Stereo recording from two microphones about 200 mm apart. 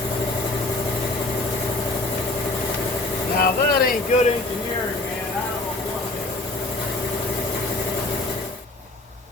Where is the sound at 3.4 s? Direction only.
45° left (ahead or behind).